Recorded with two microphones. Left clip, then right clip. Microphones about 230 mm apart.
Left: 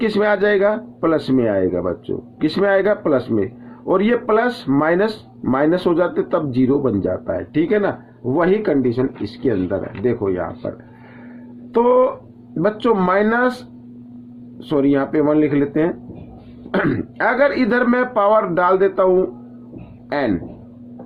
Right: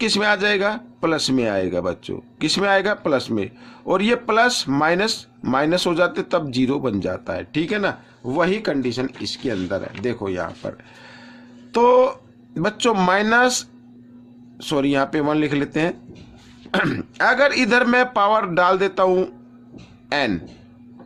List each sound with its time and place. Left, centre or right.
0.0 s a man's voice: right
11.7 s a man's voice: right
14.6 s a man's voice: right